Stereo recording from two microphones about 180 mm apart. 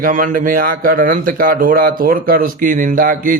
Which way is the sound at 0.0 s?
50° right (ahead or behind).